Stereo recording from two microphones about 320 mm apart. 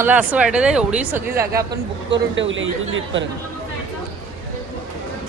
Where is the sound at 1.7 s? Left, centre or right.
Right.